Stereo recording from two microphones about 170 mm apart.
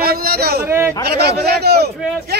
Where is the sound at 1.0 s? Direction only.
70° right (ahead or behind).